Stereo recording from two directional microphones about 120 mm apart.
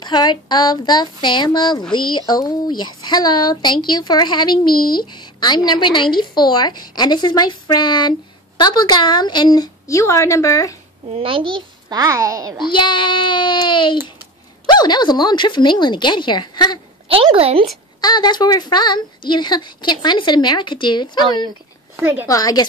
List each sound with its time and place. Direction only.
0.0 s speech: 35° left (ahead or behind)
11.1 s a child's voice: 50° right (ahead or behind)
12.0 s a woman's voice: 30° right (ahead or behind)
12.7 s speech: 40° left (ahead or behind)
17.1 s speech: 50° right (ahead or behind)
18.0 s speech: 35° left (ahead or behind)
22.0 s a woman's voice: 15° right (ahead or behind)
22.3 s speech: 30° left (ahead or behind)